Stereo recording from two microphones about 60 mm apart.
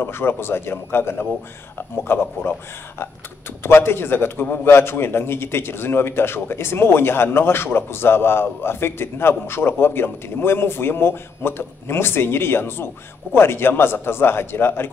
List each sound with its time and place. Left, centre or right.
0.0 s a man's voice: left
3.6 s a man's voice: left